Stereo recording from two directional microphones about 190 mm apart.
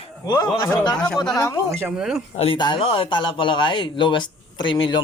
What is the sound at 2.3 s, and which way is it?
Speech, 30° left (ahead or behind).